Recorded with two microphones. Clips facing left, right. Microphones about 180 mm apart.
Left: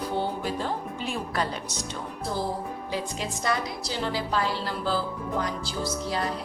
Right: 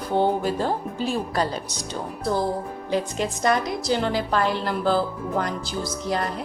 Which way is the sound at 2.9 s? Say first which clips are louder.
Right 8 dB; 50° right (ahead or behind).